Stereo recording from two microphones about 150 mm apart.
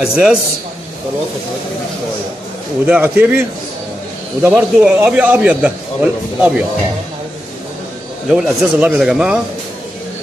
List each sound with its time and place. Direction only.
0.0 s speech: 5° right (ahead or behind)
2.9 s a man's voice: 15° right (ahead or behind)
4.5 s a man's voice: 10° right (ahead or behind)
8.3 s speech: 5° right (ahead or behind)